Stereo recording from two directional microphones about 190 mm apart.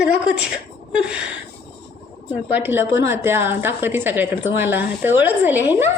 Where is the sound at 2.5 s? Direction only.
10° right (ahead or behind).